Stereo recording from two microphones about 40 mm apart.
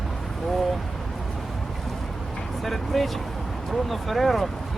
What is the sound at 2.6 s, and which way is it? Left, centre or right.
Speech, centre.